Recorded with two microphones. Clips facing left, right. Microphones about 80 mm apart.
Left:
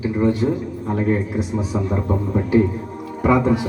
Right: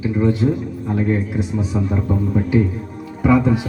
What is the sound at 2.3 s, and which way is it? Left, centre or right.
Speech, centre.